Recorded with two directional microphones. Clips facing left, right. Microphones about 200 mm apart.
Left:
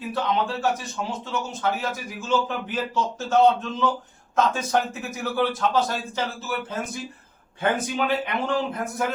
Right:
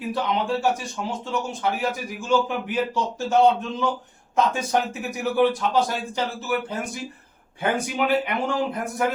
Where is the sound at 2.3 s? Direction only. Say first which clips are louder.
Right 2 dB; 15° right (ahead or behind).